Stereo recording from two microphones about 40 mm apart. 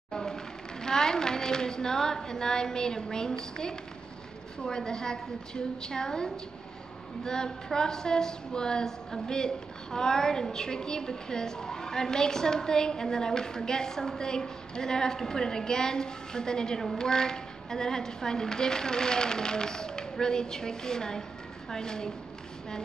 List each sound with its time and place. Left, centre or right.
0.1 s a woman's voice: centre